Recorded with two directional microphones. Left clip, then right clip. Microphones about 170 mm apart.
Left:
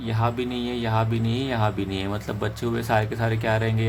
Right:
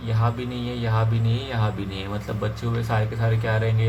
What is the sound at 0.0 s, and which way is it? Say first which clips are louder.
Speech: left 2 dB; 55° left (ahead or behind).